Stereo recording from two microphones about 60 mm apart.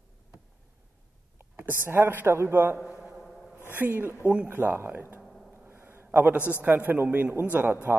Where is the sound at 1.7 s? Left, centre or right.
Right.